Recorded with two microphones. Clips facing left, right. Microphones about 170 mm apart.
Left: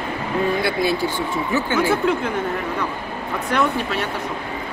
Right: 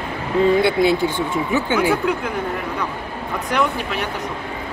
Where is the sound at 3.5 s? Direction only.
15° right (ahead or behind).